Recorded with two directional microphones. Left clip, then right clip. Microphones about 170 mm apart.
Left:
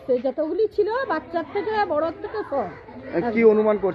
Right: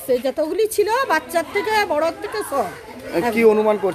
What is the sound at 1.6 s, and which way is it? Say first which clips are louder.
Speech: right 3 dB; 45° right (ahead or behind).